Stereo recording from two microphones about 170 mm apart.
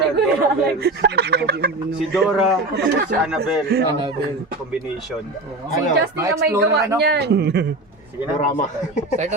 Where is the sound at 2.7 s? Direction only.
85° right.